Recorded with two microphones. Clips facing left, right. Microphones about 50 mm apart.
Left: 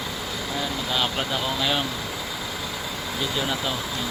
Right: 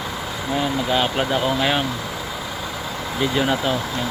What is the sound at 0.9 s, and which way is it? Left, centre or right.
Speech, right.